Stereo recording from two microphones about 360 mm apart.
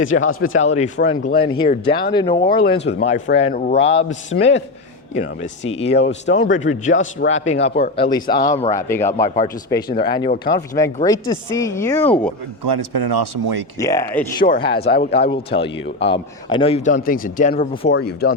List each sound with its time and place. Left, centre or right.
0.3 s speech: left
0.6 s a man's voice: centre
2.6 s a man's voice: left; by 12.3 s centre
12.6 s speech: right
13.7 s a man's voice: centre
14.3 s speech: left
14.8 s speech: left
15.3 s a man's voice: centre